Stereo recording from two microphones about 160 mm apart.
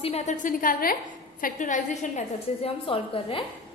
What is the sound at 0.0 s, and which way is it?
A woman's voice, 45° left (ahead or behind).